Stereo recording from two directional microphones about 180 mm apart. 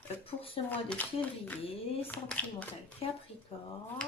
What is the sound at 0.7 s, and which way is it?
Speech, 10° left (ahead or behind).